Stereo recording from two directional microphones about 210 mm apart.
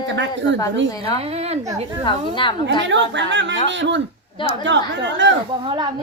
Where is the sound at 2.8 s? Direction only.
60° right (ahead or behind).